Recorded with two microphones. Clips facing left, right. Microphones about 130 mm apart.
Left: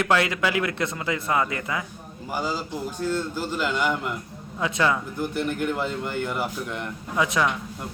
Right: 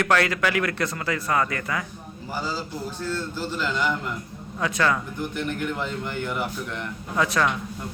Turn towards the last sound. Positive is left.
turn(degrees=15)  # may be behind; listen again after turning